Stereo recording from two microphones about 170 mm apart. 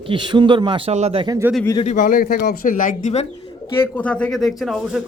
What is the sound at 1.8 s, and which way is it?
Speech, 50° left (ahead or behind).